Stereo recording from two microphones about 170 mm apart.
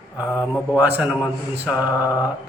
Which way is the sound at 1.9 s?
20° left (ahead or behind).